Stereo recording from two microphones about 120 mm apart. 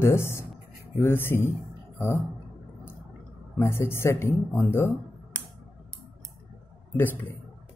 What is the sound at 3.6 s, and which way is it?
Speech, 20° left (ahead or behind).